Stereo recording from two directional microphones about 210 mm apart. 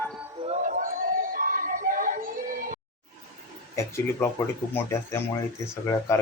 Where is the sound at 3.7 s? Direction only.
15° left (ahead or behind).